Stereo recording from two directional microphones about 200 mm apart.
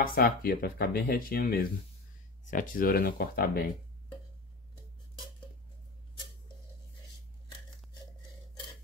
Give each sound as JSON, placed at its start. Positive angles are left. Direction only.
{"t": 0.0, "sound": "speech", "side_deg": 50}